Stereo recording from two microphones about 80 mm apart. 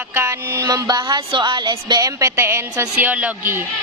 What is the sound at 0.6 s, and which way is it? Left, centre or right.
A woman's voice, right.